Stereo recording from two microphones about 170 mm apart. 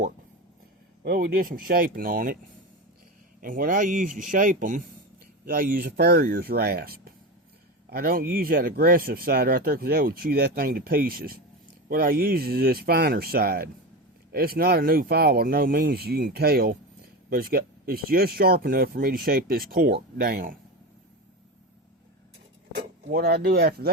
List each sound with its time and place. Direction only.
1.0 s speech: 55° right (ahead or behind)
3.4 s speech: 50° right (ahead or behind)
23.1 s speech: 65° right (ahead or behind)